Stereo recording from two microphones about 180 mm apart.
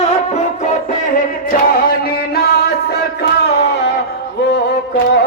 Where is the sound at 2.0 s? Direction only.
60° left (ahead or behind).